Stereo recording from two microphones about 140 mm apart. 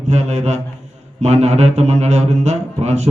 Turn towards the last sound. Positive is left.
turn(degrees=-55)  # may be behind; listen again after turning